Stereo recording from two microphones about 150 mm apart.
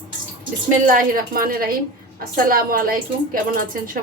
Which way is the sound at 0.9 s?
70° right (ahead or behind).